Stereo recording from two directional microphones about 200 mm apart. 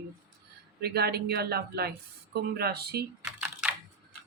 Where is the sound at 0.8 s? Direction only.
55° right (ahead or behind).